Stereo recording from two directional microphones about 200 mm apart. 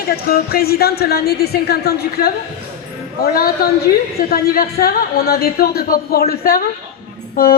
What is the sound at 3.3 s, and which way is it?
Speech, 50° left (ahead or behind).